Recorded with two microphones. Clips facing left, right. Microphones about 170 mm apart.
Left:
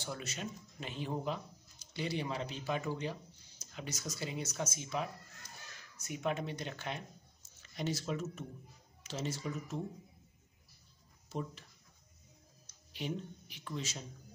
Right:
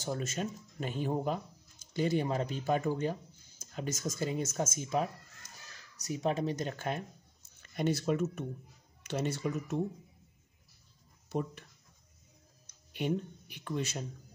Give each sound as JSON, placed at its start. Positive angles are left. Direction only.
{"t": 0.0, "sound": "speech", "side_deg": -45}
{"t": 11.2, "sound": "speech", "side_deg": -60}
{"t": 12.9, "sound": "speech", "side_deg": -55}